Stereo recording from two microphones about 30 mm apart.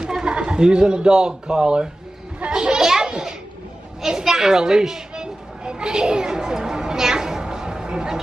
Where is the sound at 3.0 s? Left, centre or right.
Right.